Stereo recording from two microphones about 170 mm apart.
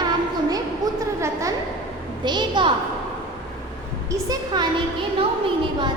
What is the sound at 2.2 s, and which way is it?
Speech, 25° right (ahead or behind).